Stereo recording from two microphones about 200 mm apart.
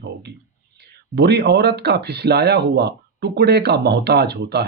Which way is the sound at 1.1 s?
55° right (ahead or behind).